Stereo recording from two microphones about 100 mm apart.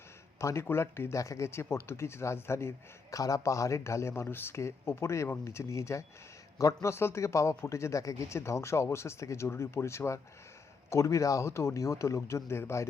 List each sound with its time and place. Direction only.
0.3 s speech: 30° left (ahead or behind)